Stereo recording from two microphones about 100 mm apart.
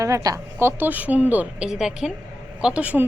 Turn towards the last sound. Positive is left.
turn(degrees=-15)  # may be behind; listen again after turning